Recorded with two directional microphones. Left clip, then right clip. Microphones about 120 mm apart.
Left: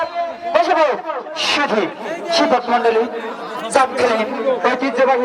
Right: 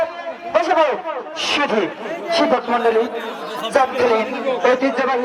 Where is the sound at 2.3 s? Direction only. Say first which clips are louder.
Left 2 dB; 40° left (ahead or behind).